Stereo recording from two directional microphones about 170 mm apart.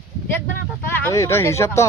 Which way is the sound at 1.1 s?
15° left (ahead or behind).